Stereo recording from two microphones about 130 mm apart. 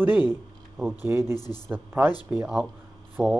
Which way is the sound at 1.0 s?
20° right (ahead or behind).